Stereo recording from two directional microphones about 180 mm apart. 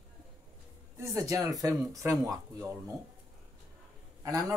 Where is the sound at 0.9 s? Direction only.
15° right (ahead or behind).